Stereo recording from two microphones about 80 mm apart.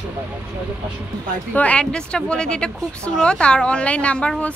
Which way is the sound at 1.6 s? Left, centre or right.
Centre.